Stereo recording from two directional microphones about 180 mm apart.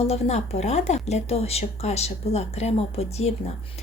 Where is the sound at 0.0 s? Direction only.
35° left (ahead or behind).